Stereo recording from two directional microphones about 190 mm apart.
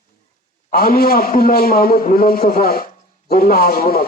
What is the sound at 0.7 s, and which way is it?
A man's voice, 50° left (ahead or behind).